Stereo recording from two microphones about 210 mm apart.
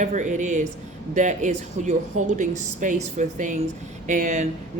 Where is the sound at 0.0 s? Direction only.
35° right (ahead or behind).